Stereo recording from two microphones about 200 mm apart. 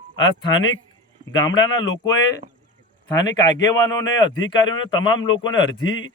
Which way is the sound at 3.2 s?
20° left (ahead or behind).